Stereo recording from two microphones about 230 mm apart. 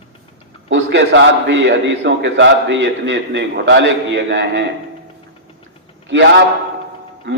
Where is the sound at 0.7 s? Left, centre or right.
Right.